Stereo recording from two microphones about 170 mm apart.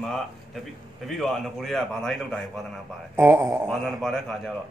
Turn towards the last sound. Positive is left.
turn(degrees=5)  # may be behind; listen again after turning